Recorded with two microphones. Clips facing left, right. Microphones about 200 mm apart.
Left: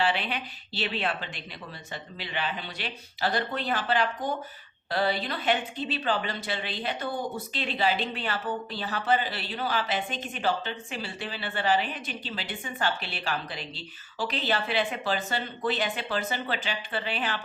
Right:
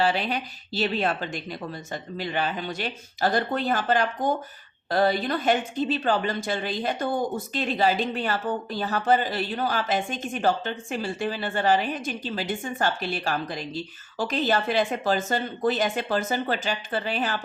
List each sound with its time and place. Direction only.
0.0 s a woman's voice: 40° right (ahead or behind)